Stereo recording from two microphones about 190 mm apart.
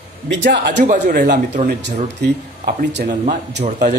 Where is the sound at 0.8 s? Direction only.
45° right (ahead or behind).